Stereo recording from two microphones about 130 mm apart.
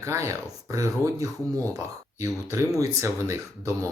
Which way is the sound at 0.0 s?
20° right (ahead or behind).